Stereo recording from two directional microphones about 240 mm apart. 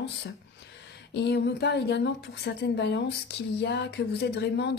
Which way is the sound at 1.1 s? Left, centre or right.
Left.